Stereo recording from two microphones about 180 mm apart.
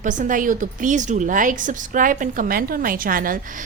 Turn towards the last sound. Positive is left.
turn(degrees=-50)  # may be behind; listen again after turning